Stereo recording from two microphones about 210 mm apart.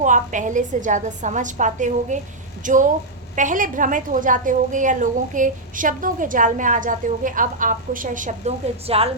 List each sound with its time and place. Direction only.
0.0 s a woman's voice: 35° right (ahead or behind)